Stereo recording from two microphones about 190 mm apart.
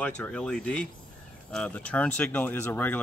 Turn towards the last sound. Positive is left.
turn(degrees=10)  # may be behind; listen again after turning